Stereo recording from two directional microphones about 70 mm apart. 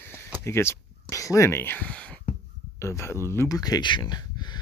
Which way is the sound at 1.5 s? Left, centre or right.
Left.